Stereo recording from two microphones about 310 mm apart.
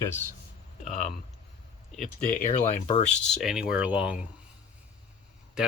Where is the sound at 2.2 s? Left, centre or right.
Left.